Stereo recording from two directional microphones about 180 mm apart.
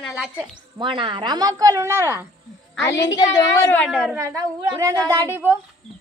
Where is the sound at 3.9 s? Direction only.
5° right (ahead or behind).